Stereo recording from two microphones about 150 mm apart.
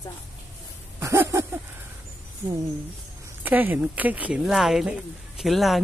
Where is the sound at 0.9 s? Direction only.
20° right (ahead or behind).